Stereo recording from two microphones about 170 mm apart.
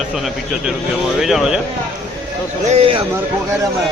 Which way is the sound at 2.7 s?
35° right (ahead or behind).